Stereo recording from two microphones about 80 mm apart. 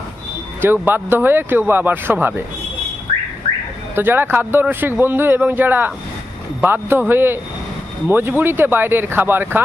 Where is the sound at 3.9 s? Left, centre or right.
Right.